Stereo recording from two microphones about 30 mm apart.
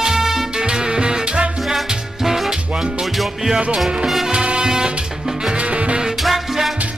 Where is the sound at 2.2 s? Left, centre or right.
Centre.